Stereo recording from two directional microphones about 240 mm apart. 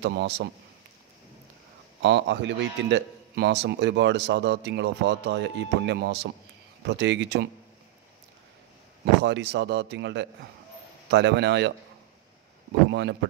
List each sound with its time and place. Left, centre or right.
0.0 s a man's voice: right
2.0 s a man's voice: right
9.2 s a man's voice: right
12.9 s a man's voice: right